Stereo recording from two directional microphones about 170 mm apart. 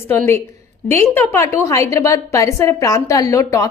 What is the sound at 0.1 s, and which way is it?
A woman's voice, 15° left (ahead or behind).